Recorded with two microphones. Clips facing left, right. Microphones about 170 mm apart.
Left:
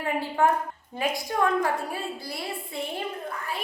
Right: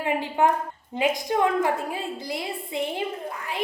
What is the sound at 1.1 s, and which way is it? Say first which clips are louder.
A woman's voice: even; 20° right (ahead or behind).